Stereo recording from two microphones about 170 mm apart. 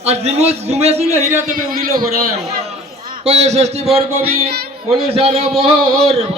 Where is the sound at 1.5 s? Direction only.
55° right (ahead or behind).